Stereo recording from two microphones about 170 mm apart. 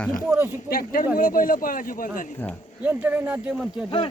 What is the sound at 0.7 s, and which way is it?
Speech, 60° left (ahead or behind).